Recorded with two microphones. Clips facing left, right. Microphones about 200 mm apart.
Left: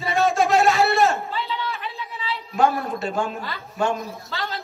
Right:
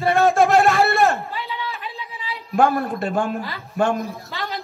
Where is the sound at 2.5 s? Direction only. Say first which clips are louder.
Right 3 dB; 50° right (ahead or behind).